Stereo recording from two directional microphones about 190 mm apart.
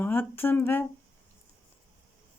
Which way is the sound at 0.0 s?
10° left (ahead or behind).